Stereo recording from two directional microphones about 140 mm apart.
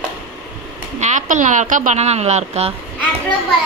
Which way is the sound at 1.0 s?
60° right (ahead or behind).